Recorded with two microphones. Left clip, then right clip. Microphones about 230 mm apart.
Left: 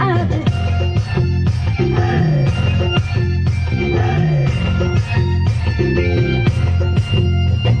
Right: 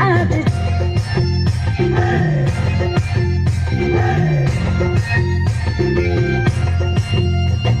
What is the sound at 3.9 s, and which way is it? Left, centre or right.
Music, right.